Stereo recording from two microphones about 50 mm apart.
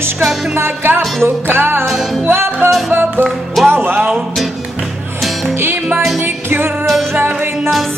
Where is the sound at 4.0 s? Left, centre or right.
Right.